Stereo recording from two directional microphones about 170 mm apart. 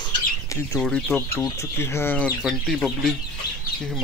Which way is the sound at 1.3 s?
15° left (ahead or behind).